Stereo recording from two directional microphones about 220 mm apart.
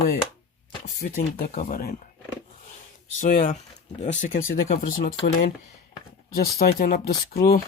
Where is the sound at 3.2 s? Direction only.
35° left (ahead or behind).